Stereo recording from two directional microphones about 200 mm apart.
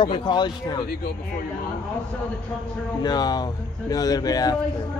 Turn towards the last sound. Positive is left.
turn(degrees=20)  # may be behind; listen again after turning